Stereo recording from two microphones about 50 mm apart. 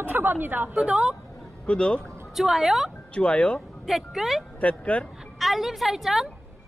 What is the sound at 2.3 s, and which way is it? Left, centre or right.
Speech, centre.